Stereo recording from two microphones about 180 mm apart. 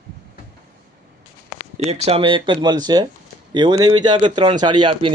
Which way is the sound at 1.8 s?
35° right (ahead or behind).